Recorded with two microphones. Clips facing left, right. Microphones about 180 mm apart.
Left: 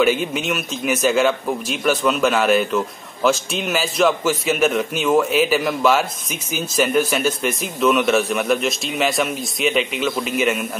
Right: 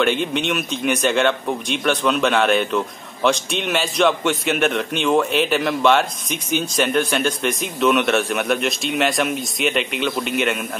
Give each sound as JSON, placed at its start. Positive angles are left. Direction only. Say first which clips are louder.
{"t": 0.0, "sound": "a man's voice", "louder": "left 1 dB", "side_deg": 5}